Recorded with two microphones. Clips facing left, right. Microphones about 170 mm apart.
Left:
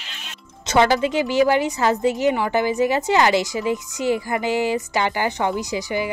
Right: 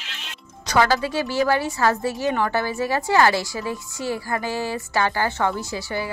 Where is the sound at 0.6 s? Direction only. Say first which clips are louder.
Left 3 dB; 25° left (ahead or behind).